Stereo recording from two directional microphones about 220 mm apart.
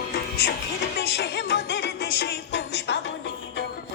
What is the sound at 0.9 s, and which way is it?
Music, 50° left (ahead or behind).